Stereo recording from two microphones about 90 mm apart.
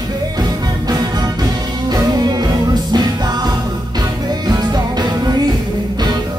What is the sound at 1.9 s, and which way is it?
Music, 50° right (ahead or behind).